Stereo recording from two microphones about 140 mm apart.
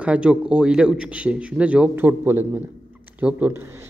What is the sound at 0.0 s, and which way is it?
A man's voice, 10° right (ahead or behind).